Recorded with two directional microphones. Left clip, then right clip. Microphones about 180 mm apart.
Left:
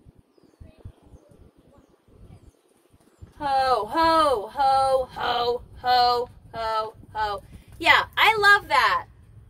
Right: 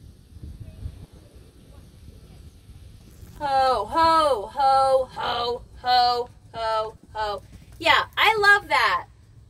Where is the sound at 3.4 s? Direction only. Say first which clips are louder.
Right 1 dB; 50° left (ahead or behind); by 8.9 s 20° left (ahead or behind).